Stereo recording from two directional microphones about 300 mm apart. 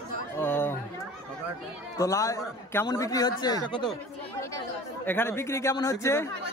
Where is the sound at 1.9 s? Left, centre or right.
Centre.